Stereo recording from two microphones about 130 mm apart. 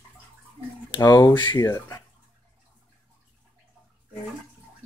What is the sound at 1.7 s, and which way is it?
Speech, 25° left (ahead or behind).